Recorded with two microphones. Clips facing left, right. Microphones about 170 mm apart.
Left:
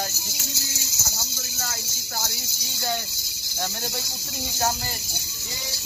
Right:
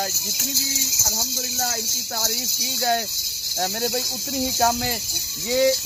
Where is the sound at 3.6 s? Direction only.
70° right (ahead or behind).